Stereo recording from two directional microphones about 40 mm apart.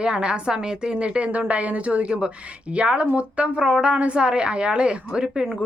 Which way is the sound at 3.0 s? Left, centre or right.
Right.